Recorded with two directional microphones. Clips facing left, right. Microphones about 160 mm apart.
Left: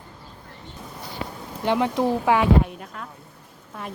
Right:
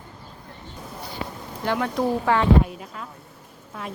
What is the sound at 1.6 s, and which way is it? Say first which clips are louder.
Speech: left 2 dB; 20° left (ahead or behind).